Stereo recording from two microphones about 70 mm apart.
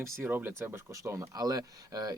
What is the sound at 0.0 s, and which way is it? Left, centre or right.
Speech, right.